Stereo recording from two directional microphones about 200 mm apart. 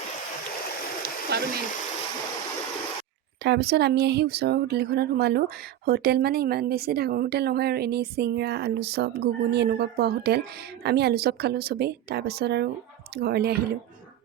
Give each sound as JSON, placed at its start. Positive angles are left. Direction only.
{"t": 1.3, "sound": "speech", "side_deg": -55}
{"t": 3.4, "sound": "speech", "side_deg": -55}